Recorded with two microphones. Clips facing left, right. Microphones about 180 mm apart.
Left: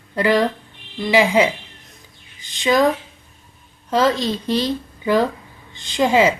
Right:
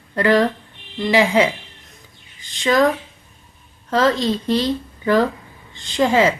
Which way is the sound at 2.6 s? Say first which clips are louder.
Even; 15° left (ahead or behind).